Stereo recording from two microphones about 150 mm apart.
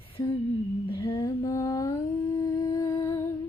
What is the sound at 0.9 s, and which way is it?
Lullaby, 30° left (ahead or behind).